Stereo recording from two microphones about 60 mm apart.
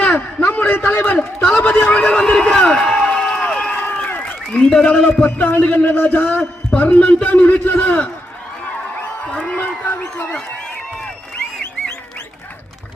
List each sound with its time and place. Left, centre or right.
0.0 s a man's voice: left
1.5 s a man's voice: centre
3.5 s a sound: centre
4.0 s applause: left
4.5 s a man's voice: centre
5.2 s a man's voice: left
9.2 s a sound: centre